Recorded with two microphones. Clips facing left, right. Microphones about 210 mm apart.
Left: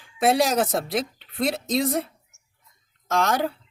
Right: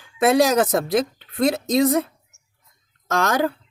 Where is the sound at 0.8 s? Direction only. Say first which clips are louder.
Right 6 dB; 45° right (ahead or behind).